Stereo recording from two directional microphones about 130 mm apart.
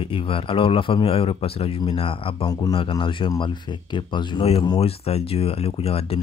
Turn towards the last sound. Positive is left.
turn(degrees=50)  # may be behind; listen again after turning